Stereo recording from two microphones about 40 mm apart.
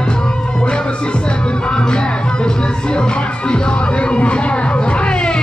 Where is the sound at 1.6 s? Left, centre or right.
Left.